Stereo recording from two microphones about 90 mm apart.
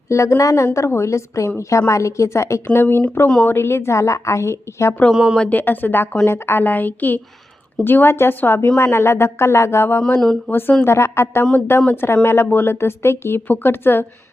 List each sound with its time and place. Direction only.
0.1 s a woman's voice: 35° left (ahead or behind)
5.1 s speech: 10° right (ahead or behind)
5.4 s a woman's voice: 20° left (ahead or behind)
10.2 s speech: 5° left (ahead or behind)
10.5 s a woman's voice: 25° left (ahead or behind)